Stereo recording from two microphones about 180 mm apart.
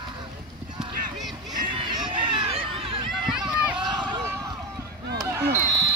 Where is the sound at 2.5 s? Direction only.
30° right (ahead or behind).